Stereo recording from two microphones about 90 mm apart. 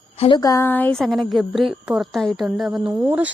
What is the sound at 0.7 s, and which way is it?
Speech, 20° left (ahead or behind).